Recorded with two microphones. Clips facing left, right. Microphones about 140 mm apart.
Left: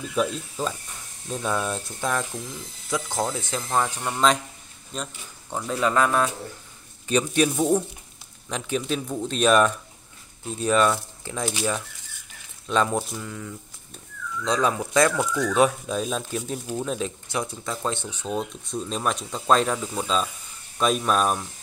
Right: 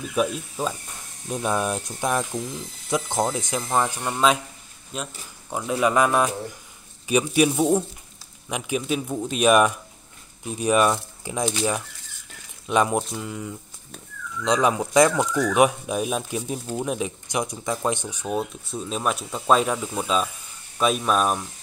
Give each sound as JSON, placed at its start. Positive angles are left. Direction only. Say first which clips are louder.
{"t": 0.1, "sound": "speech", "louder": "right 1 dB", "side_deg": -10}